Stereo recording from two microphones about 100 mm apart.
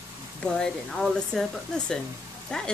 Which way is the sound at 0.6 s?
5° left (ahead or behind).